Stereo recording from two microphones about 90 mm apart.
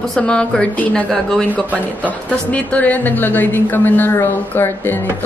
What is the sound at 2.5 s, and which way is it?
A woman's voice, 15° left (ahead or behind).